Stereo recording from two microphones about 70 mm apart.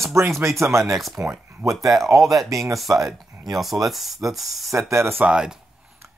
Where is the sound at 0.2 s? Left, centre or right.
Right.